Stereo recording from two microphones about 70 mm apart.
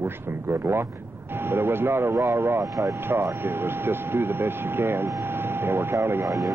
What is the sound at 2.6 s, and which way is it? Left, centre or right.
Speech, right.